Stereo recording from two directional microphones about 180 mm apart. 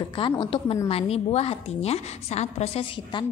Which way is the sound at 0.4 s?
30° left (ahead or behind).